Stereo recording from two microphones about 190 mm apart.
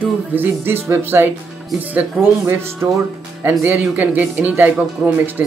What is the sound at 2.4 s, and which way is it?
Speech, 15° right (ahead or behind).